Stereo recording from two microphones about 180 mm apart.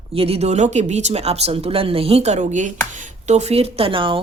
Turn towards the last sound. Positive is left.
turn(degrees=-30)  # may be behind; listen again after turning